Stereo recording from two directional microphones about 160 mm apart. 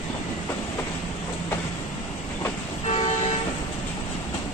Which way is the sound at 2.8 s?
40° left (ahead or behind).